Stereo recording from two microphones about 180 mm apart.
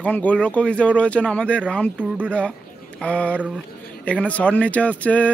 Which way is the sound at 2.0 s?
10° right (ahead or behind).